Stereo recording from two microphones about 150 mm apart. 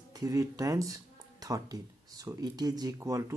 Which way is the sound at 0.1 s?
20° right (ahead or behind).